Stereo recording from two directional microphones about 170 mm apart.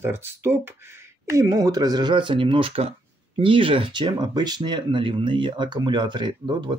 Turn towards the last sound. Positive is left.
turn(degrees=-25)  # may be behind; listen again after turning